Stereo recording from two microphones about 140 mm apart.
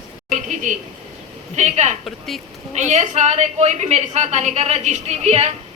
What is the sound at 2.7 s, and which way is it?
A woman's voice, 55° right (ahead or behind).